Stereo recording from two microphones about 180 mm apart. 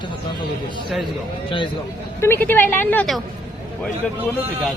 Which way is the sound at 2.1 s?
15° left (ahead or behind).